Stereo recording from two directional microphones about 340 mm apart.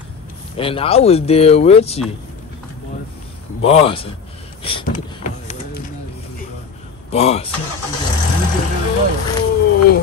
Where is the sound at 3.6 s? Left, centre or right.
Centre.